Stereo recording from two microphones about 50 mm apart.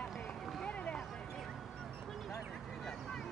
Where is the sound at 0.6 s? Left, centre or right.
Left.